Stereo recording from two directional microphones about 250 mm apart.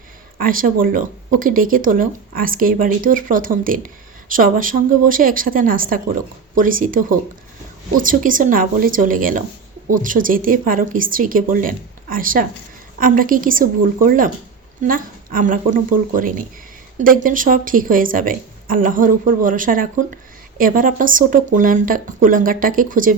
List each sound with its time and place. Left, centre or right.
0.3 s speech: right